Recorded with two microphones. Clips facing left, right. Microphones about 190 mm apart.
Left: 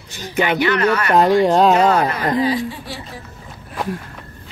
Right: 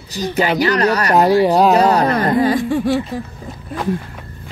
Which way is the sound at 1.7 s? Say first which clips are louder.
Right 2 dB; 35° right (ahead or behind).